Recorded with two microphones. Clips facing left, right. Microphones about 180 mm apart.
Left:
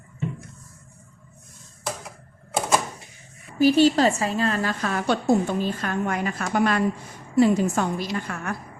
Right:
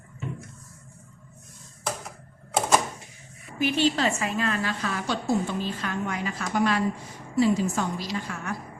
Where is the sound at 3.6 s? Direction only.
40° left (ahead or behind); by 8.5 s 55° left (ahead or behind).